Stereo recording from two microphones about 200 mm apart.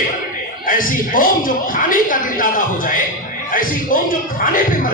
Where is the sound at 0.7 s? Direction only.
45° left (ahead or behind).